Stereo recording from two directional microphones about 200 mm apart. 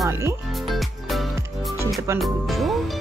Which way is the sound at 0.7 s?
Centre (ahead or behind).